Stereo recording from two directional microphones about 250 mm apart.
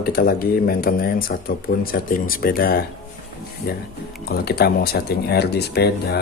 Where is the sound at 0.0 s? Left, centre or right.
Left.